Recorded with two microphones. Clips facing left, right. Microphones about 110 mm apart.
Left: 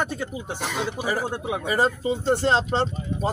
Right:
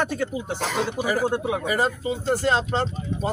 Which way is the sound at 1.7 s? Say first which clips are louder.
Left 4 dB; 30° left (ahead or behind).